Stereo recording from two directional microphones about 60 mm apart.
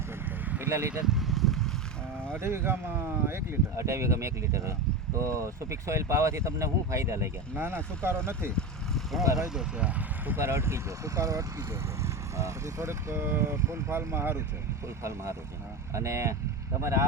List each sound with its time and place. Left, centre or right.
0.6 s speech: right
1.0 s boat: centre
2.3 s speech: right
7.5 s speech: right
9.2 s speech: right
9.6 s speech: centre
10.3 s speech: right
15.0 s speech: right